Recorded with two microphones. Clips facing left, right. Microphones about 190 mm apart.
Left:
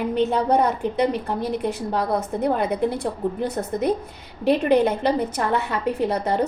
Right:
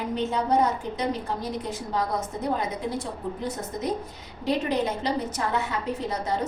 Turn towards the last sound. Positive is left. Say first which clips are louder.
# left 6 dB
turn(degrees=60)  # may be behind; listen again after turning